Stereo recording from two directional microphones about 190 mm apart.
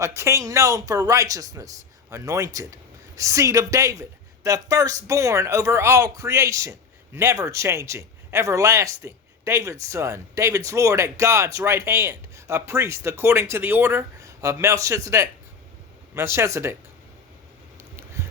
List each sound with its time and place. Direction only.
0.2 s speech: 15° right (ahead or behind)